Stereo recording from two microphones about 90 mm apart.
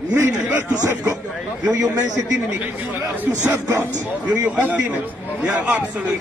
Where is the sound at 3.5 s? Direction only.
30° right (ahead or behind).